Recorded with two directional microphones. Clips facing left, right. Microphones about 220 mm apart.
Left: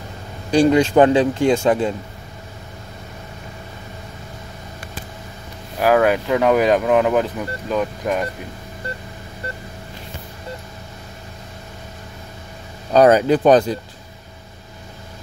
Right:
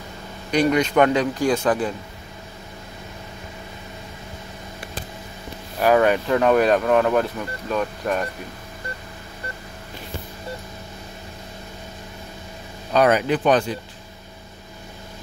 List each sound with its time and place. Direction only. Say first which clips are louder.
0.5 s speech: left 5 dB; 30° left (ahead or behind)
5.8 s speech: left 1 dB; 5° left (ahead or behind)
12.9 s speech: left 5 dB; 35° left (ahead or behind)